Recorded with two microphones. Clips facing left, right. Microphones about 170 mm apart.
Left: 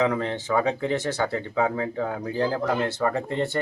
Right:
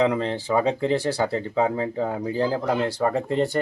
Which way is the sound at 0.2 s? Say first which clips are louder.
Right 2 dB; 30° right (ahead or behind).